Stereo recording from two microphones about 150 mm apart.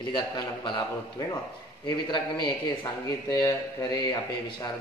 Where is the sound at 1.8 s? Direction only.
30° left (ahead or behind).